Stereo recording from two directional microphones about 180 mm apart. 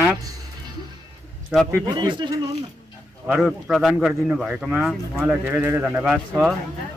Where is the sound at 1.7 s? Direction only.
25° right (ahead or behind).